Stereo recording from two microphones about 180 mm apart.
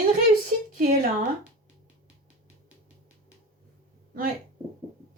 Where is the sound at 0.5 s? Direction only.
45° right (ahead or behind).